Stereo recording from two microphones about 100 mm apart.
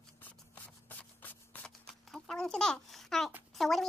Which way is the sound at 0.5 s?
15° left (ahead or behind).